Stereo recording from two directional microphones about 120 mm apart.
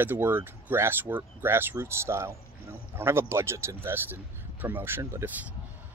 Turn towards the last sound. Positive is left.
turn(degrees=-20)  # may be behind; listen again after turning